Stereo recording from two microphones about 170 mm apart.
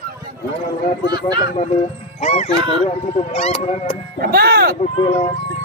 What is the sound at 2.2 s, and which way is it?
A man's voice, 40° left (ahead or behind).